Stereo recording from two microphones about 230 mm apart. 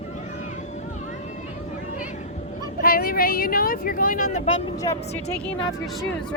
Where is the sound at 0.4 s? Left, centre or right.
Left.